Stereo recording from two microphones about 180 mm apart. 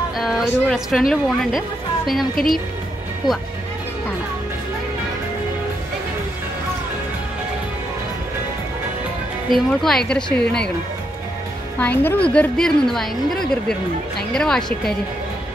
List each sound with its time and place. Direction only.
0.2 s a woman's voice: centre (ahead or behind)
3.2 s speech: 25° left (ahead or behind)
9.5 s a woman's voice: centre (ahead or behind)
11.8 s a woman's voice: 10° left (ahead or behind)